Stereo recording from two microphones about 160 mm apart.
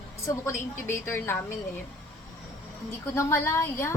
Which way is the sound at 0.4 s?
15° left (ahead or behind).